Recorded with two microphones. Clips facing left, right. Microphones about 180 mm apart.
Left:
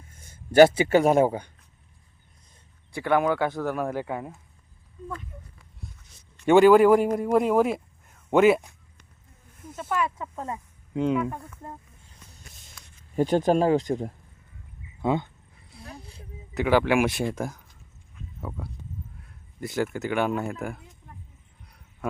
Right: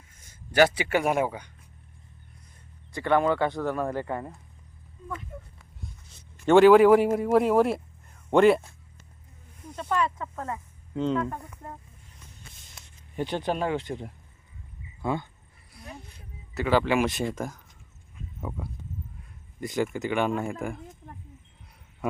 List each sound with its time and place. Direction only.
0.8 s speech: 30° left (ahead or behind)
2.9 s speech: 5° left (ahead or behind)
6.4 s speech: 5° left (ahead or behind)
9.6 s speech: 5° left (ahead or behind)
13.1 s speech: 45° left (ahead or behind)
15.0 s speech: 20° left (ahead or behind)
15.7 s a sound: 30° left (ahead or behind)
16.6 s speech: 10° left (ahead or behind)
18.3 s speech: centre (ahead or behind)
19.8 s speech: 5° left (ahead or behind)